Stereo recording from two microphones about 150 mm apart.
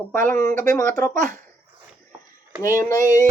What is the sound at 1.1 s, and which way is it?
Speech, 55° right (ahead or behind).